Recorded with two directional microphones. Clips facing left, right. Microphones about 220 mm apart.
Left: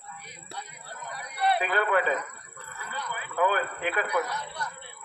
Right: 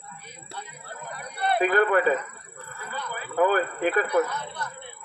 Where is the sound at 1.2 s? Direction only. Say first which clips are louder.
Right 3 dB; 50° right (ahead or behind).